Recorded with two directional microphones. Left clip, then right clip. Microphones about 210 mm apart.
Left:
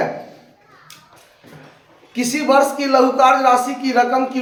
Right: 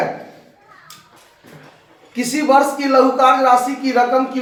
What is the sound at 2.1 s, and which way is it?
Speech, 20° left (ahead or behind).